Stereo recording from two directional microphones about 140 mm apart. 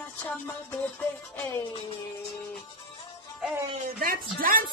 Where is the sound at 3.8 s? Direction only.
90° right.